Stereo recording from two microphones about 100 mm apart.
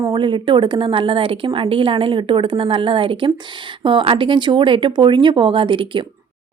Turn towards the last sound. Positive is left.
turn(degrees=-55)  # may be behind; listen again after turning